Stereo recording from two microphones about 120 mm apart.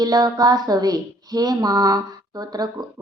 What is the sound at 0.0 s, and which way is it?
Speech, 35° right (ahead or behind).